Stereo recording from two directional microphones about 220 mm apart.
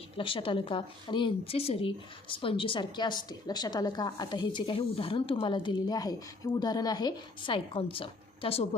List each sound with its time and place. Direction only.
0.2 s a woman's voice: 25° left (ahead or behind)